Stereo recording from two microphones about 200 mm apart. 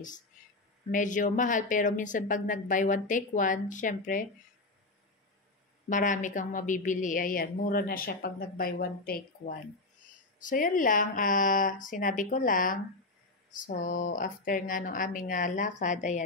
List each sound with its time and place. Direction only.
0.9 s speech: 40° left (ahead or behind)
5.9 s a woman's voice: 40° left (ahead or behind)